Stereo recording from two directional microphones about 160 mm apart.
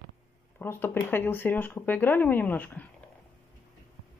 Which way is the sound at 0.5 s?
15° left (ahead or behind).